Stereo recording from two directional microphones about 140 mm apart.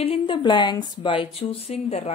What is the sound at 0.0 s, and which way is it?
Speech, 40° left (ahead or behind).